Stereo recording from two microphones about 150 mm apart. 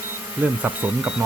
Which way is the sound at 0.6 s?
10° right (ahead or behind).